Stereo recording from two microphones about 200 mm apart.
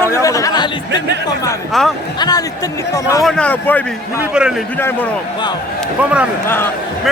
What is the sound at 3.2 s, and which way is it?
Speech, 5° left (ahead or behind).